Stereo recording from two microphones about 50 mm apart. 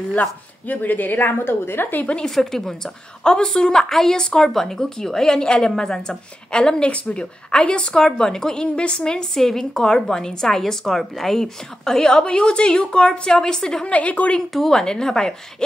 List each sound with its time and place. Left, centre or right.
0.2 s a woman's voice: left
2.2 s a woman's voice: centre
13.8 s a woman's voice: left
14.5 s a woman's voice: centre